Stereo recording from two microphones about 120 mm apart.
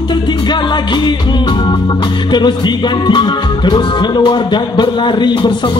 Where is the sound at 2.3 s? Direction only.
40° left (ahead or behind).